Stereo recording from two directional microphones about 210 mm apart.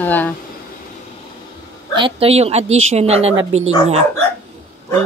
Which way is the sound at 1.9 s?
25° right (ahead or behind).